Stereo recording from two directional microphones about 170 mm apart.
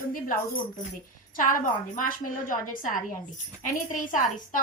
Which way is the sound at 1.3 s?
50° left (ahead or behind).